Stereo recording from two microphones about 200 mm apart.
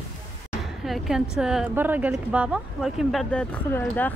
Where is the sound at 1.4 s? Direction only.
5° right (ahead or behind).